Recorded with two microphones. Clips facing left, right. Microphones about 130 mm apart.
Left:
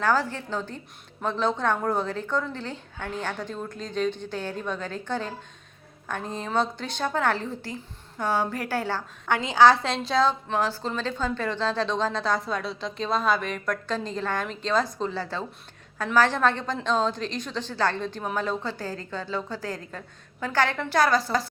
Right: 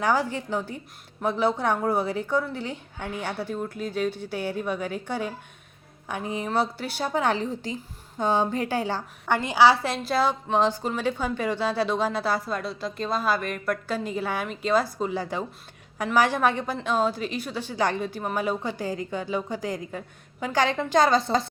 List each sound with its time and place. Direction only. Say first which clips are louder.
0.0 s speech: even; 15° right (ahead or behind)
10.5 s speech: right 3 dB; 20° right (ahead or behind)